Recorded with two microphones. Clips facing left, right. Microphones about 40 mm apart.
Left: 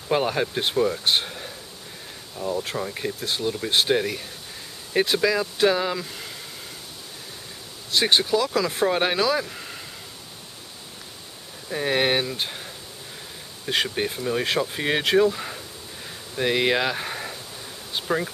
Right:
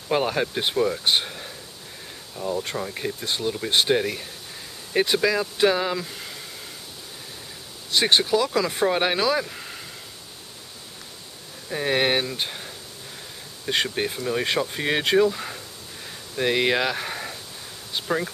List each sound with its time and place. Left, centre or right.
0.1 s speech: centre
7.9 s speech: centre
11.7 s speech: centre